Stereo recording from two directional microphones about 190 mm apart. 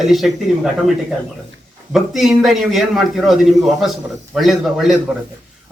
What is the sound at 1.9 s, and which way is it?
A man's voice, centre (ahead or behind).